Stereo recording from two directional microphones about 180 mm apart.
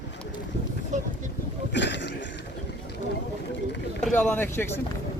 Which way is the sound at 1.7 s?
75° left (ahead or behind).